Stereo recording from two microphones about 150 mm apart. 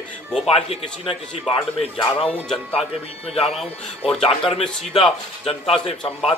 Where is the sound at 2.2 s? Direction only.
10° left (ahead or behind).